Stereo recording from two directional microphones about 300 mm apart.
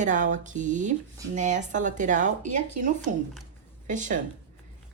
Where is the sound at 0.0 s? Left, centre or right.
Right.